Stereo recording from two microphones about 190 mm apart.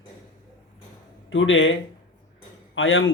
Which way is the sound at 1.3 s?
85° left.